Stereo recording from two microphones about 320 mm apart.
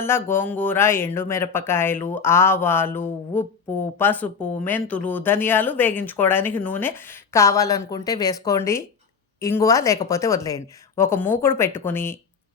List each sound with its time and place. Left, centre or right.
0.0 s speech: centre